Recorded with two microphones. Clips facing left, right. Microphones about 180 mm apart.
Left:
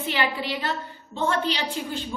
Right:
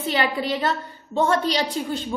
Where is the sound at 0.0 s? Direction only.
40° right (ahead or behind).